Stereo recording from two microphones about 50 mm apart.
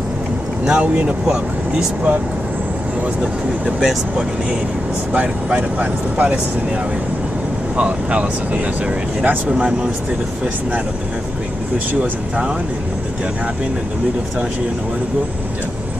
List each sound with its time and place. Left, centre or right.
0.7 s speech: right
3.8 s speech: centre
5.1 s speech: right
7.7 s speech: right
9.5 s speech: centre
12.0 s speech: right